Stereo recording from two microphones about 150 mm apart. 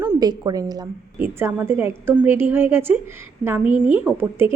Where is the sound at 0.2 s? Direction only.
25° right (ahead or behind).